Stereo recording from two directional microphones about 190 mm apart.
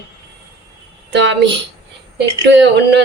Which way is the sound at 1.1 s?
70° right (ahead or behind).